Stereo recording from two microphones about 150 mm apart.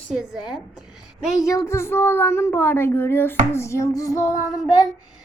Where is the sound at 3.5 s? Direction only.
20° left (ahead or behind).